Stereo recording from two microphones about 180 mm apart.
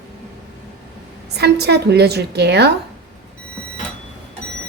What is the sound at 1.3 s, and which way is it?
Speech, 65° right (ahead or behind).